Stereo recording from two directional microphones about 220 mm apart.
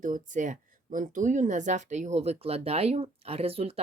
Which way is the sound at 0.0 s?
35° right (ahead or behind).